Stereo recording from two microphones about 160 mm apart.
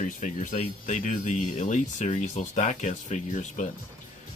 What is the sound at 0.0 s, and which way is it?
Speech, 55° left (ahead or behind).